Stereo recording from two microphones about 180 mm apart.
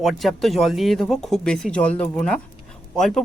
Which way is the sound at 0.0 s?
Centre (ahead or behind).